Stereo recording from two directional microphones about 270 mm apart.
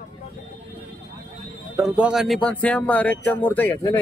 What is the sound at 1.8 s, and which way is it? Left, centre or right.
Speech, centre.